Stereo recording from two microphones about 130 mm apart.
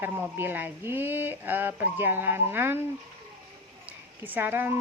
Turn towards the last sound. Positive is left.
turn(degrees=-15)  # may be behind; listen again after turning